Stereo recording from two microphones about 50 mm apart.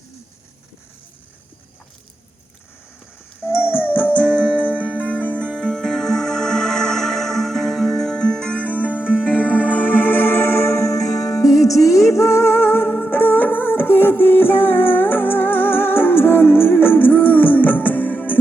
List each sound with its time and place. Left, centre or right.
3.4 s music: left
5.5 s music: centre
8.5 s music: left
9.0 s music: centre
9.7 s music: left